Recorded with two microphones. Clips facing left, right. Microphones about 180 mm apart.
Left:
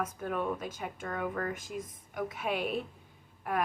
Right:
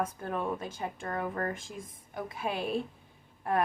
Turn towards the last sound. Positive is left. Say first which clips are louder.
# right 3 dB
turn(degrees=-25)  # may be behind; listen again after turning